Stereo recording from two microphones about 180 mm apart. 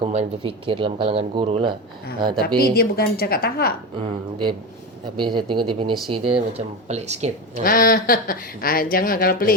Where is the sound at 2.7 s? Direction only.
60° left (ahead or behind).